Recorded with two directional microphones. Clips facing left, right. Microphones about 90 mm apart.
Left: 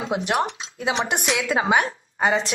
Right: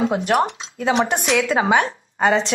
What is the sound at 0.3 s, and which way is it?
Speech, 35° right (ahead or behind).